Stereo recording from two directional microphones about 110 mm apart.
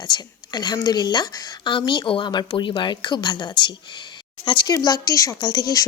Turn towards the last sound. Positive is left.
turn(degrees=35)  # may be behind; listen again after turning